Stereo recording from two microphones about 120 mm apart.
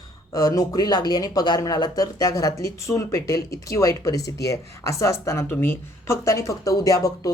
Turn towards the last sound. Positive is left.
turn(degrees=30)  # may be behind; listen again after turning